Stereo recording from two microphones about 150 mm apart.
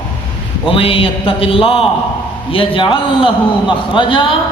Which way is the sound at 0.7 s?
35° left (ahead or behind).